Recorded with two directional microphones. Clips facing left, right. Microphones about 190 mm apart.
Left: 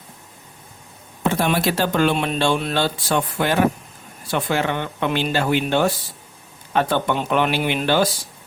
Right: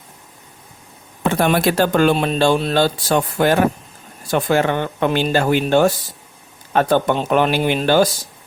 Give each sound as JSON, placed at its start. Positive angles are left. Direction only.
{"t": 1.3, "sound": "speech", "side_deg": -55}